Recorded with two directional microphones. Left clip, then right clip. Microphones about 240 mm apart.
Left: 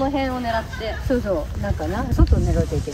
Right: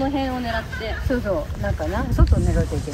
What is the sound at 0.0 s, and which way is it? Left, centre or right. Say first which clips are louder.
Speech: left 2 dB; left.